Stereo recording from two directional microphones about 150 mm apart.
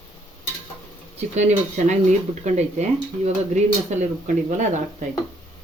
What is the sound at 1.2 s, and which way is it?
Speech, 50° right (ahead or behind).